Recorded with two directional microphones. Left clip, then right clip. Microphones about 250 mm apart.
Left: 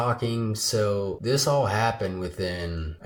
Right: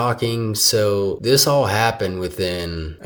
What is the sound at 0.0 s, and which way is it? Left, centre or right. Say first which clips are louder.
Speech: right 6 dB; right.